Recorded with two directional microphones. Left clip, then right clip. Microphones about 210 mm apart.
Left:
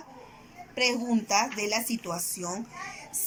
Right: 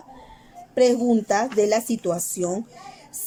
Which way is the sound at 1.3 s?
45° right (ahead or behind).